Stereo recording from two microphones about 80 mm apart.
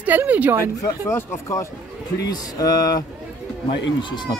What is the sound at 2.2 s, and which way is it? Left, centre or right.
Speech, left.